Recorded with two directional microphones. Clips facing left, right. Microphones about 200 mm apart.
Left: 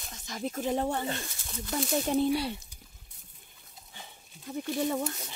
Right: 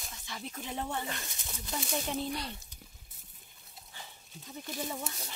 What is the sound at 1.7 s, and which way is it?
Speech, 50° left (ahead or behind).